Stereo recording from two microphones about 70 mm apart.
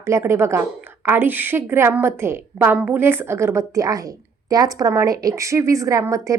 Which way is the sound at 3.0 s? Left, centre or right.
Right.